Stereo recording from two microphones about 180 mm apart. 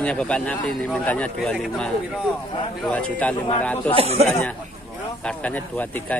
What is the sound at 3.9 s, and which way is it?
Speech, 35° right (ahead or behind).